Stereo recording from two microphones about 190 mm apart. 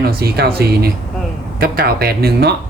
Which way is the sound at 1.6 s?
50° right (ahead or behind).